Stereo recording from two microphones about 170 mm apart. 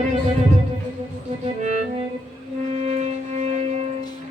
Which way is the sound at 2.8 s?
40° right (ahead or behind).